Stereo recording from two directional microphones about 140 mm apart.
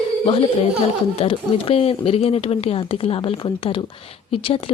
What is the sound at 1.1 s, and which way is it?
Speech, 40° left (ahead or behind).